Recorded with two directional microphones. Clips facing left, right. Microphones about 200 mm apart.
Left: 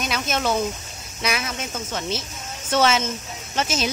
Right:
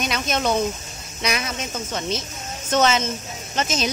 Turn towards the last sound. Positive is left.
turn(degrees=10)  # may be behind; listen again after turning